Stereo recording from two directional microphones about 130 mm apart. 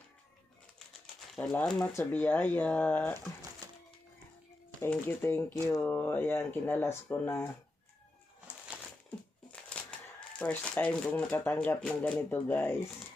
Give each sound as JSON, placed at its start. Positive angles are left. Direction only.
{"t": 1.4, "sound": "speech", "side_deg": 10}
{"t": 1.9, "sound": "speech", "side_deg": 20}
{"t": 2.1, "sound": "speech", "side_deg": 10}
{"t": 3.6, "sound": "music", "side_deg": -30}
{"t": 4.8, "sound": "speech", "side_deg": 15}
{"t": 9.0, "sound": "speech", "side_deg": 10}